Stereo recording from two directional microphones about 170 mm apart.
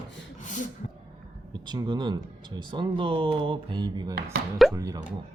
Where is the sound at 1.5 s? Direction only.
25° right (ahead or behind).